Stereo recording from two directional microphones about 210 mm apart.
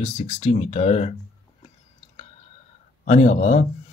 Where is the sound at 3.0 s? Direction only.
35° left (ahead or behind).